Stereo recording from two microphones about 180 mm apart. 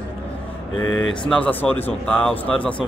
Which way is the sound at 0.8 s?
90° left.